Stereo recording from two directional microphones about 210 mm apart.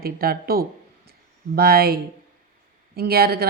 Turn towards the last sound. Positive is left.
turn(degrees=-50)  # may be behind; listen again after turning